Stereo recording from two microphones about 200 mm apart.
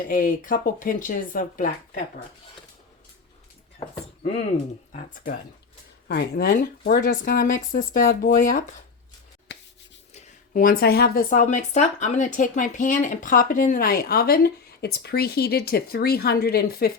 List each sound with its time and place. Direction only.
0.1 s speech: 45° left (ahead or behind)
3.8 s speech: 30° left (ahead or behind)
4.9 s speech: 45° left (ahead or behind)
10.5 s speech: 45° left (ahead or behind)